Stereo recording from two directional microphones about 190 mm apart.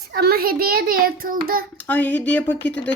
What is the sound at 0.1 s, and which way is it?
A child's voice, 55° right (ahead or behind).